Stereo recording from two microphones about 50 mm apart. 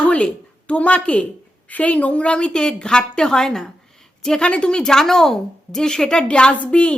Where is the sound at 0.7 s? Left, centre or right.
Left.